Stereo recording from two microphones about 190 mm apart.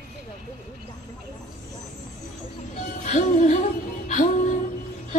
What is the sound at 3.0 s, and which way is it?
Music, 40° left (ahead or behind).